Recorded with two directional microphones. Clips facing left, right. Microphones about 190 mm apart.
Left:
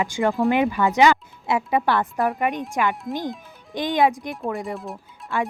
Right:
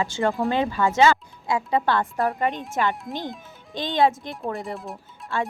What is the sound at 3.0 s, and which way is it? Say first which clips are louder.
Speech: left 4 dB; centre (ahead or behind).